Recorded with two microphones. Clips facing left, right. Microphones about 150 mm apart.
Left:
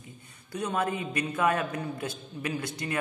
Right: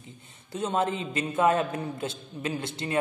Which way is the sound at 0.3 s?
25° right (ahead or behind).